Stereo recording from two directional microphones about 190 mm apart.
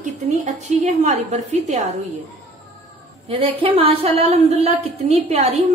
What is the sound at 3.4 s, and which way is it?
A woman's voice, 30° right (ahead or behind).